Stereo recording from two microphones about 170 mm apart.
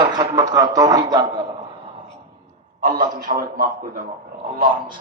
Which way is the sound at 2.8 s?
55° right (ahead or behind).